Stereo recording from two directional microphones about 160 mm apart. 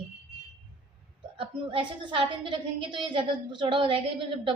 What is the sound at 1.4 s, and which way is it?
A woman's voice, 35° right (ahead or behind).